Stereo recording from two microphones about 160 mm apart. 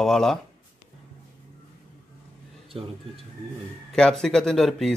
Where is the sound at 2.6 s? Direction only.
35° right (ahead or behind).